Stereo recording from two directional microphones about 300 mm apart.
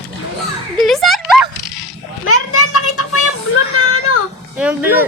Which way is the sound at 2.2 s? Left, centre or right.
Left.